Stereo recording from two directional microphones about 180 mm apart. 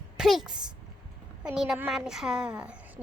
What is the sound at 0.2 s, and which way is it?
A child's voice, centre (ahead or behind).